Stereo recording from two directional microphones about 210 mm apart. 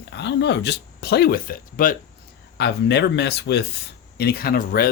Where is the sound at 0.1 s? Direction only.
55° left (ahead or behind).